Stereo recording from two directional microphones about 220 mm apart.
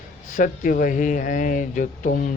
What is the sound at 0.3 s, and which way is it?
Speech, 40° left (ahead or behind).